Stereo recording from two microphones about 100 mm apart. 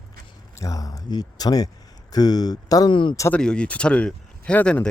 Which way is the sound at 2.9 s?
55° left (ahead or behind).